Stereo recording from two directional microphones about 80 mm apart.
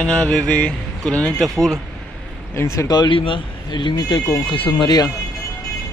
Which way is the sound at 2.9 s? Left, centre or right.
Left.